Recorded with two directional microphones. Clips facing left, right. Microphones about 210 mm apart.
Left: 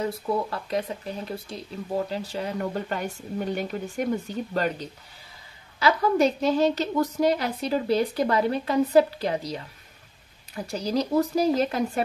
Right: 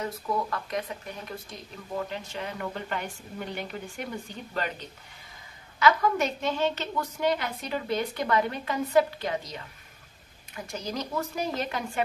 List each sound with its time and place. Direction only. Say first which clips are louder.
0.0 s speech: left 4 dB; 30° left (ahead or behind)